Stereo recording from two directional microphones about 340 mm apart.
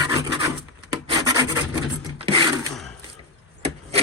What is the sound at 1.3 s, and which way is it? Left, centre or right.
Filing, centre.